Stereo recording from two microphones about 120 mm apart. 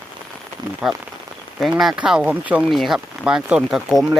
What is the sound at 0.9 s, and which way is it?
Speech, centre (ahead or behind).